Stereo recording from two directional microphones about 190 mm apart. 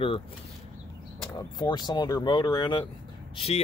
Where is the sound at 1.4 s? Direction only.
20° left (ahead or behind).